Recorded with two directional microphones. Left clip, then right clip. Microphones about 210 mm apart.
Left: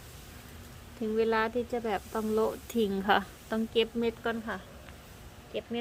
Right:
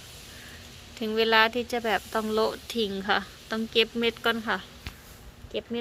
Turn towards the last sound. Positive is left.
turn(degrees=-25)  # may be behind; listen again after turning